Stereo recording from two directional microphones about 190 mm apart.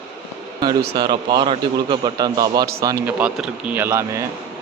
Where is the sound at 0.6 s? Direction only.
20° right (ahead or behind).